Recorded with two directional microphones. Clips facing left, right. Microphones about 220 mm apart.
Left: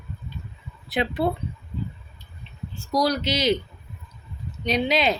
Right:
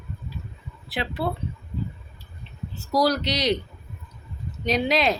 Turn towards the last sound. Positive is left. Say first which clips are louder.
# even
turn(degrees=0)  # may be behind; listen again after turning